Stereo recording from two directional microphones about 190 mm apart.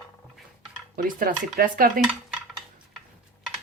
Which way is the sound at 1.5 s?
45° right (ahead or behind).